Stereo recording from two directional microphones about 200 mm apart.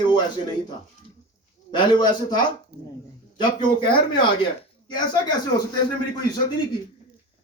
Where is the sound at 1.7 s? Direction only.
25° left (ahead or behind).